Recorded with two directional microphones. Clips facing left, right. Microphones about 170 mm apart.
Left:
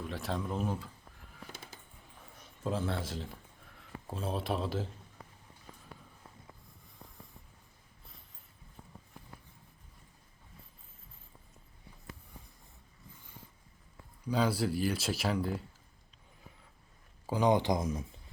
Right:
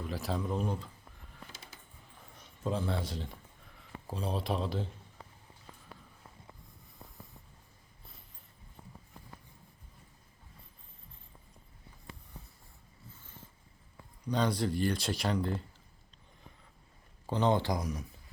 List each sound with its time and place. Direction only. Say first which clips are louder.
0.0 s speech: right 1 dB; centre (ahead or behind)
2.6 s speech: right 1 dB; centre (ahead or behind)
14.3 s speech: even; 5° left (ahead or behind)
17.2 s speech: left 1 dB; 10° left (ahead or behind)